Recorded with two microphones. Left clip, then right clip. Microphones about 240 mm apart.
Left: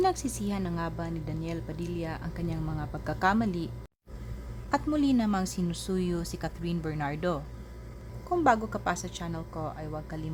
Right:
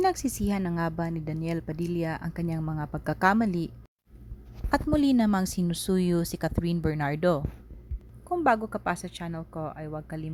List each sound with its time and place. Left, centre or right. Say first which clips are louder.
0.0 s speech: right 2 dB; right
4.7 s a woman's voice: right 3 dB; right
8.4 s speech: even; right